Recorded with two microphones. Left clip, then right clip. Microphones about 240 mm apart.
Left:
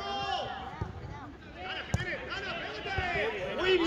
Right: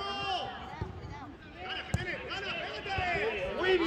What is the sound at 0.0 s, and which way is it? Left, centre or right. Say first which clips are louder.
Run: left 1 dB; right.